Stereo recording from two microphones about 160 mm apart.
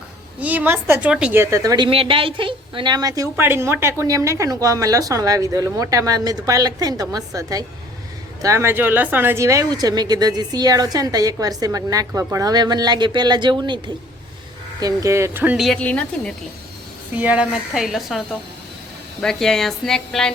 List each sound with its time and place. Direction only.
0.3 s a woman's voice: 10° right (ahead or behind); by 16.3 s 10° left (ahead or behind)
17.2 s a woman's voice: 10° right (ahead or behind)